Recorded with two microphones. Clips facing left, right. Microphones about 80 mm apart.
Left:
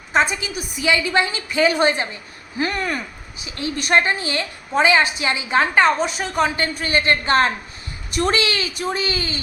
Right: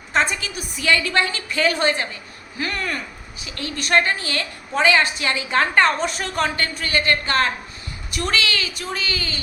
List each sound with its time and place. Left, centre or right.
0.1 s a woman's voice: centre
6.6 s a woman's voice: left